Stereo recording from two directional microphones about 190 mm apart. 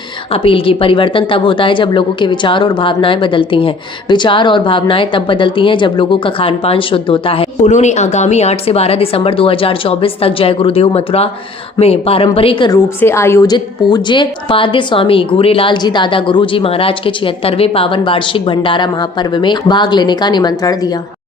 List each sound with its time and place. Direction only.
0.4 s speech: 30° left (ahead or behind)
13.0 s speech: 15° left (ahead or behind)